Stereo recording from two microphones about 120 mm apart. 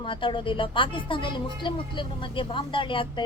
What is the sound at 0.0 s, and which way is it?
Speech, 45° left (ahead or behind).